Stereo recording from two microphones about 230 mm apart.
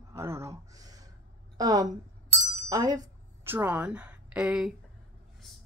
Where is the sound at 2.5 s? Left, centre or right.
Centre.